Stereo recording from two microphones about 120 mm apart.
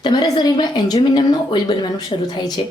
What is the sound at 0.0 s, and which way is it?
A woman's voice, 40° left (ahead or behind).